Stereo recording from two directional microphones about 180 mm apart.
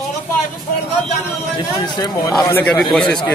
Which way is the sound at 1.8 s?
25° left (ahead or behind).